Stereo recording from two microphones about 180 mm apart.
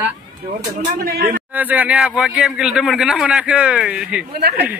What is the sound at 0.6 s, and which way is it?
Speech, 45° right (ahead or behind).